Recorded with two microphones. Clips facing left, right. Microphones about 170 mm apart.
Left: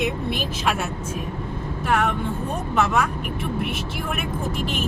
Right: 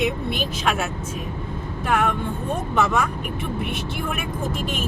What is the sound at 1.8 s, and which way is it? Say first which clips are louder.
Speech: even; centre (ahead or behind).